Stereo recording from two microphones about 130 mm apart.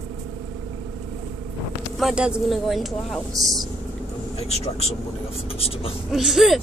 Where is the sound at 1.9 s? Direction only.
5° right (ahead or behind).